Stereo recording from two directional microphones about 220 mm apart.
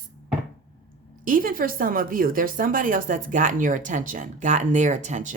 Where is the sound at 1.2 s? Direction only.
40° right (ahead or behind).